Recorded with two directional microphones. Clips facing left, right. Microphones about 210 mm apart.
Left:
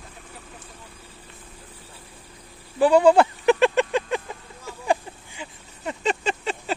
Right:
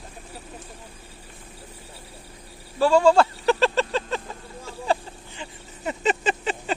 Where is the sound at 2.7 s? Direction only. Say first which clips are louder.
Left 2 dB; 20° left (ahead or behind).